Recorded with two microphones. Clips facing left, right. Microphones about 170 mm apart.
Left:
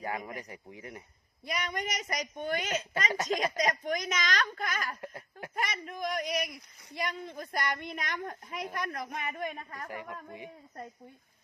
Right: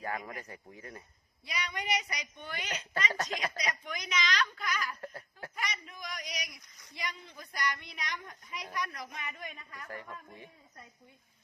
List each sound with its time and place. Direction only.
0.3 s speech: 20° left (ahead or behind)
1.5 s a man's voice: 50° left (ahead or behind)
4.9 s a sound: 15° left (ahead or behind)
5.5 s a man's voice: 50° left (ahead or behind)
9.9 s speech: 15° left (ahead or behind)